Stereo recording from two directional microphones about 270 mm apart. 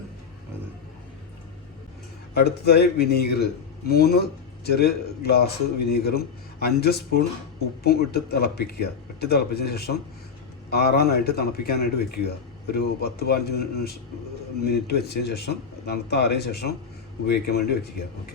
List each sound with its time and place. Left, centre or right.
2.3 s a man's voice: left